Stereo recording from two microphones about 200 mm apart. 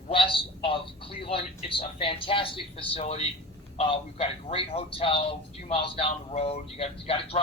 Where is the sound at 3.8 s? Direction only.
30° left (ahead or behind).